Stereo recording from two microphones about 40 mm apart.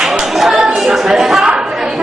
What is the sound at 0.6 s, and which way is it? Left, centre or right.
Chatter, centre.